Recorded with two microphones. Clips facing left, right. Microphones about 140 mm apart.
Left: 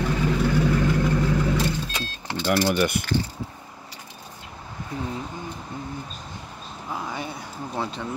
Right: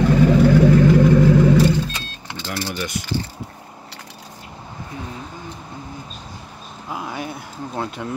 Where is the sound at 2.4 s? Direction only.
55° left (ahead or behind).